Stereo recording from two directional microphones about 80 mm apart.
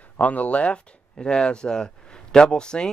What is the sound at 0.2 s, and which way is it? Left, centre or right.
Speech, centre.